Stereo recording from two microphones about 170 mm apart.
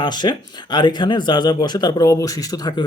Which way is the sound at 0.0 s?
25° left (ahead or behind).